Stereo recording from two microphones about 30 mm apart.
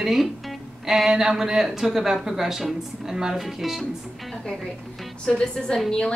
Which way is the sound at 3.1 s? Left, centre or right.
Right.